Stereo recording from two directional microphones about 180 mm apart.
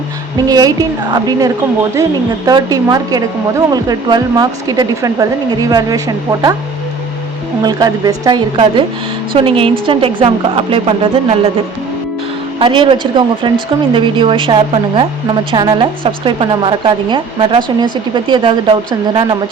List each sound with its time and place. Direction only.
0.3 s speech: 20° right (ahead or behind)
2.5 s speech: 20° right (ahead or behind)
7.6 s speech: 20° right (ahead or behind)
12.5 s speech: 30° right (ahead or behind)